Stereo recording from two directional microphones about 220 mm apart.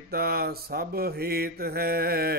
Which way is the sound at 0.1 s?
45° right (ahead or behind).